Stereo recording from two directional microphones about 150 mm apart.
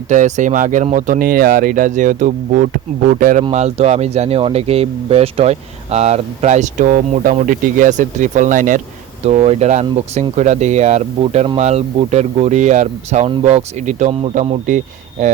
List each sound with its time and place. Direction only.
0.1 s speech: 55° right (ahead or behind)
3.5 s speech: 45° right (ahead or behind)
9.2 s speech: 45° right (ahead or behind)